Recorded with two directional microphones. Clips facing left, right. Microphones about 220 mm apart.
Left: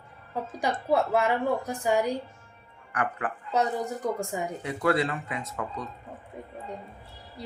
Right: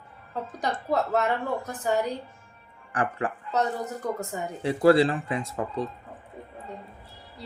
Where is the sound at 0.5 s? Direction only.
10° left (ahead or behind).